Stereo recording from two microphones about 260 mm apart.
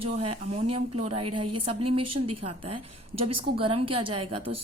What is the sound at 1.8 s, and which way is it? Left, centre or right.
A woman's voice, right.